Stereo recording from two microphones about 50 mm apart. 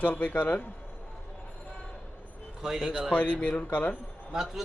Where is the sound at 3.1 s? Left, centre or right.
Left.